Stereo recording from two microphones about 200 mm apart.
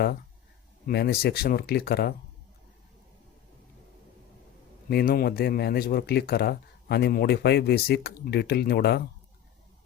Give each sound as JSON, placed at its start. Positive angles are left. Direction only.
{"t": 0.9, "sound": "speech", "side_deg": 50}
{"t": 4.9, "sound": "speech", "side_deg": 50}